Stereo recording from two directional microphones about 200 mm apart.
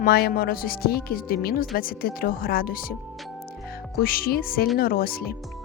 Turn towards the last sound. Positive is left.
turn(degrees=50)  # may be behind; listen again after turning